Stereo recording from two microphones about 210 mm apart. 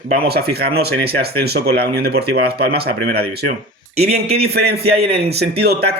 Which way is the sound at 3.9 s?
30° right (ahead or behind).